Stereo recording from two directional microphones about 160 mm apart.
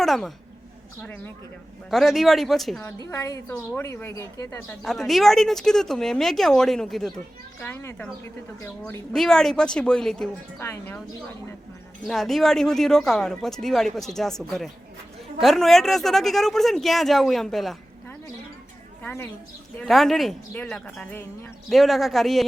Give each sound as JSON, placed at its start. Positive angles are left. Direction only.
{"t": 0.0, "sound": "speech", "side_deg": 0}
{"t": 1.0, "sound": "speech", "side_deg": 10}
{"t": 1.9, "sound": "speech", "side_deg": 0}
{"t": 3.1, "sound": "a woman's voice", "side_deg": 20}
{"t": 3.5, "sound": "speech", "side_deg": 5}
{"t": 3.8, "sound": "speech", "side_deg": 20}
{"t": 4.9, "sound": "speech", "side_deg": 0}
{"t": 7.6, "sound": "speech", "side_deg": 15}
{"t": 9.1, "sound": "speech", "side_deg": 5}
{"t": 12.0, "sound": "speech", "side_deg": 0}
{"t": 19.0, "sound": "speech", "side_deg": 10}
{"t": 19.8, "sound": "speech", "side_deg": 0}